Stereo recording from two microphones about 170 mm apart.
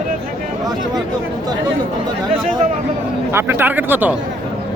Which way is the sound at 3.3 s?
15° right (ahead or behind).